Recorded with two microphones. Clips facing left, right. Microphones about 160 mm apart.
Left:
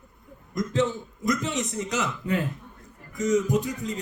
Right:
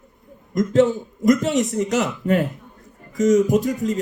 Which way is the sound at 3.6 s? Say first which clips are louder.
Right 9 dB; 45° right (ahead or behind).